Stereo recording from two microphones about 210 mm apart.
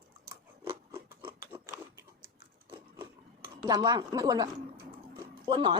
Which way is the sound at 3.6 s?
20° right (ahead or behind).